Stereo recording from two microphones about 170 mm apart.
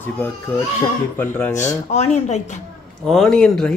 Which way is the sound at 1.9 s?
40° left (ahead or behind).